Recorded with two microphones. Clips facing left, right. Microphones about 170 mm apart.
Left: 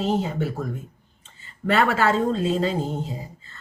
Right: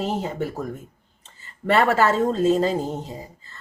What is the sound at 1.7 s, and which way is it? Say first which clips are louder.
Speech: right 2 dB; 40° right (ahead or behind).